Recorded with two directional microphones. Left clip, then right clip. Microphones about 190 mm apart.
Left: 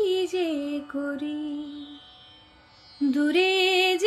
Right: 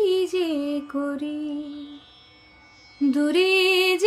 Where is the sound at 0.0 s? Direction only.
20° right (ahead or behind).